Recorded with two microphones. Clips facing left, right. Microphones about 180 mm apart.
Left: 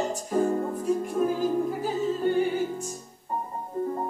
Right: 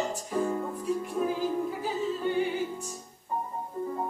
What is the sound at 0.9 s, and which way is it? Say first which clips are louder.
Music: left 4 dB; 45° left (ahead or behind).